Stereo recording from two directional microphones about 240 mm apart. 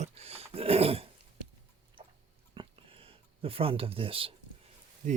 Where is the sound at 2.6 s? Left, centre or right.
Right.